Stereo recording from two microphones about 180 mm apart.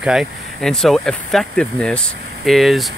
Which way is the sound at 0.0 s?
5° right (ahead or behind).